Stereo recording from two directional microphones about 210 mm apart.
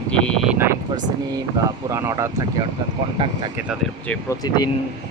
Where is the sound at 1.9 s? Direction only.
15° right (ahead or behind).